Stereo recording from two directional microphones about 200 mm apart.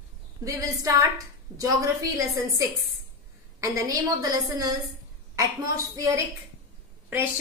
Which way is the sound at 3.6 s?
20° right (ahead or behind).